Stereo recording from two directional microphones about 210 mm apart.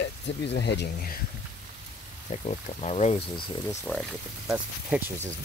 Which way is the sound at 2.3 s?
30° left (ahead or behind).